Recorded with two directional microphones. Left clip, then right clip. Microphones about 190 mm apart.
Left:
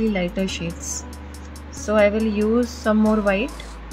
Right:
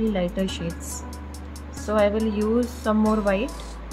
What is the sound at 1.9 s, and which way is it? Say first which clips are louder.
Speech: left 3 dB; 15° left (ahead or behind).